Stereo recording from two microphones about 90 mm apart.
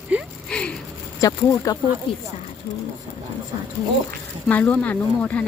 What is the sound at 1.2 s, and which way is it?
Speech, 40° left (ahead or behind).